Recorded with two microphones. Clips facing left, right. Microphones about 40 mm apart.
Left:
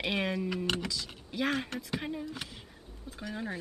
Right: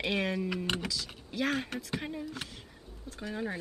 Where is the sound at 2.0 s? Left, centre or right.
Centre.